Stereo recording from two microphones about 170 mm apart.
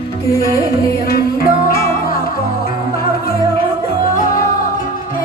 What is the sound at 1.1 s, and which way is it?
Music, 60° left (ahead or behind).